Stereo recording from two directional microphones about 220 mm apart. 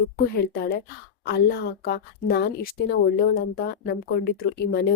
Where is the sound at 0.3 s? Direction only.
45° left (ahead or behind).